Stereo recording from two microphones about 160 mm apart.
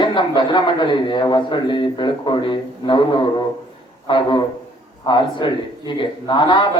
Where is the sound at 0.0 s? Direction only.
30° left (ahead or behind).